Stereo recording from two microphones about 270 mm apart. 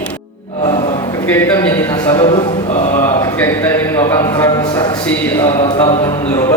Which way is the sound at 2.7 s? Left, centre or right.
Left.